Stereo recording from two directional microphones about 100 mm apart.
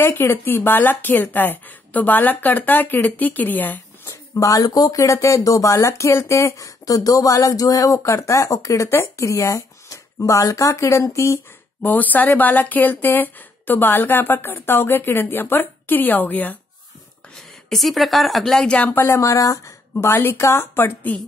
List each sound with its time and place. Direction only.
0.0 s speech: 20° left (ahead or behind)
11.3 s speech: 15° left (ahead or behind)
17.4 s speech: centre (ahead or behind)
18.9 s speech: 30° left (ahead or behind)